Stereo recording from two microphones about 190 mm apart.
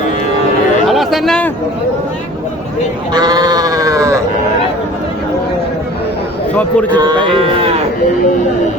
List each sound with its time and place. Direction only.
0.9 s a sound: centre (ahead or behind)
3.1 s sheep: 20° right (ahead or behind)
6.6 s a man's voice: 10° left (ahead or behind)
7.0 s speech: 25° right (ahead or behind)